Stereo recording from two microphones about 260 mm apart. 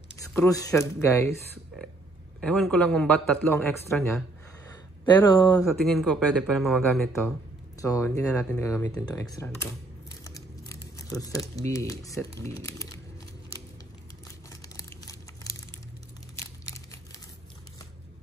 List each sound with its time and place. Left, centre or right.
0.3 s speech: centre
2.4 s speech: centre
5.7 s speech: centre
14.5 s crumpling: centre
16.3 s a sound: centre